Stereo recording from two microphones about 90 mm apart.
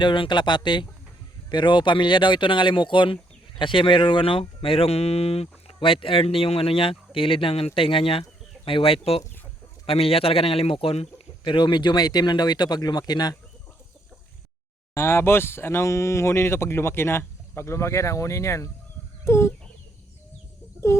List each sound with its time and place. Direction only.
0.0 s speech: 60° left (ahead or behind)
14.9 s speech: 30° left (ahead or behind)
19.2 s chicken: 35° left (ahead or behind)
20.9 s chicken: 30° left (ahead or behind)